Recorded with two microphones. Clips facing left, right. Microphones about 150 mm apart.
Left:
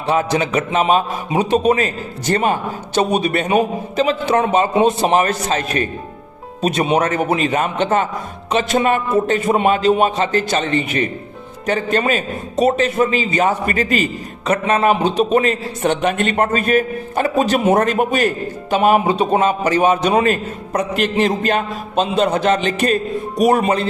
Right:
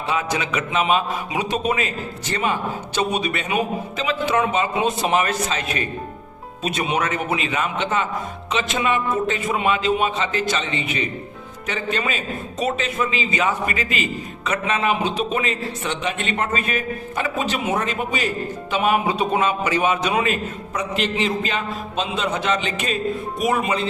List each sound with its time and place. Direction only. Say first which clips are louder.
0.1 s a man's voice: left 7 dB; 35° left (ahead or behind); by 18.3 s 55° left (ahead or behind)
18.7 s a man's voice: left 6 dB; 40° left (ahead or behind)